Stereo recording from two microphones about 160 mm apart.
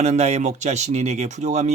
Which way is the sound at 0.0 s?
45° right (ahead or behind).